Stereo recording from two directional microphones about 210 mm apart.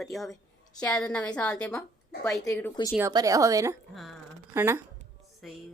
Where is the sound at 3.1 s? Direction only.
15° right (ahead or behind).